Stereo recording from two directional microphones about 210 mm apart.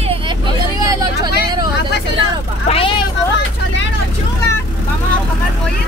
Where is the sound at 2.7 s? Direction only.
25° left (ahead or behind).